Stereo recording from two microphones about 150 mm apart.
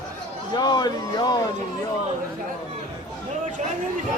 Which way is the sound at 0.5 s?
30° left (ahead or behind).